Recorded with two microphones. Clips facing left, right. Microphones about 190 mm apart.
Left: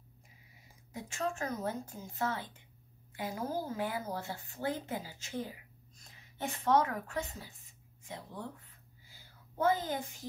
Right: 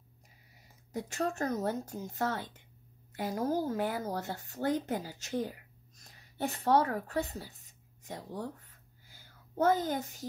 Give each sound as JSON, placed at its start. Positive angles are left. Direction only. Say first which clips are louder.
{"t": 0.9, "sound": "a child's voice", "louder": "right 4 dB", "side_deg": -40}